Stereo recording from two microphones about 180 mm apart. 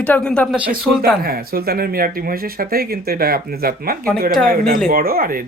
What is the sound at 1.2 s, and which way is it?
Speech, 55° right (ahead or behind).